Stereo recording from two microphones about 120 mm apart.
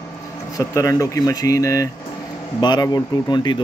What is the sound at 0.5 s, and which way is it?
Speech, 25° left (ahead or behind).